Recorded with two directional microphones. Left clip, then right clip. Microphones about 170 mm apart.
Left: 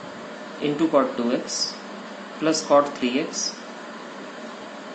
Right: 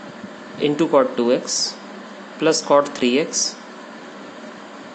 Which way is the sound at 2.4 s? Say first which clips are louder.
Right 3 dB; 80° right.